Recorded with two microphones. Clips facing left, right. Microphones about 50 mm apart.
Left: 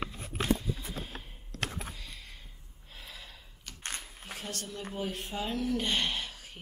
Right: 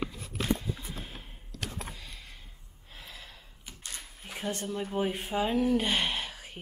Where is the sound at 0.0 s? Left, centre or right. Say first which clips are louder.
Right 1 dB; left.